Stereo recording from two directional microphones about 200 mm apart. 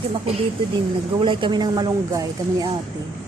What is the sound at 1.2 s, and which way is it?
Speech, 25° right (ahead or behind).